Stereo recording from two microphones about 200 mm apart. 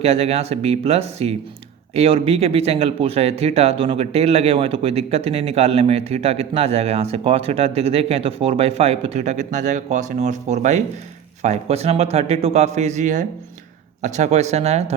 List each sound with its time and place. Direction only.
0.0 s speech: 30° right (ahead or behind)